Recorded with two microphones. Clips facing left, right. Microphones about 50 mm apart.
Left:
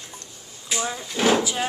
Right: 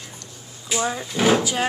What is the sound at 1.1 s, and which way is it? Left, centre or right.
Speech, centre.